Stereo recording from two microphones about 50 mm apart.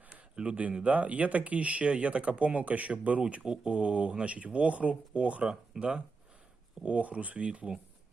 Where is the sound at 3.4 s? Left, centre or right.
Centre.